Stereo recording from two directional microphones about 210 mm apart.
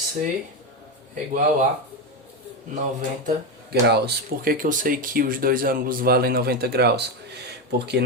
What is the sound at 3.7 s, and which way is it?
Speech, 50° right (ahead or behind).